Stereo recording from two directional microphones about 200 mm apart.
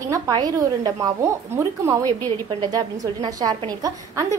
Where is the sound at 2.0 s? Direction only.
10° left (ahead or behind).